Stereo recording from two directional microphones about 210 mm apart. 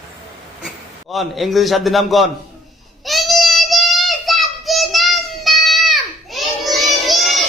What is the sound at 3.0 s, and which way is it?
Child singing, centre (ahead or behind).